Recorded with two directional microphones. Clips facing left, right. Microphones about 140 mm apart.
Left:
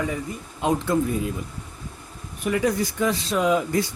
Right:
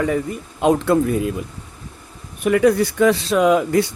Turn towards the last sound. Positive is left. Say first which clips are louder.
# right 6 dB
turn(degrees=-70)  # may be behind; listen again after turning